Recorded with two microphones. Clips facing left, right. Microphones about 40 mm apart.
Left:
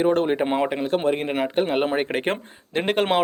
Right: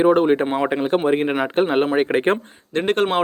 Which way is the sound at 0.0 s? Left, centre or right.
Centre.